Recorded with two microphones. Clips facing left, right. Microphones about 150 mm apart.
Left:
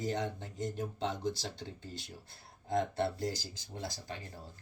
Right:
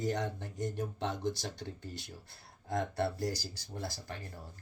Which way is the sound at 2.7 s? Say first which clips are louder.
Left 1 dB; 20° left (ahead or behind).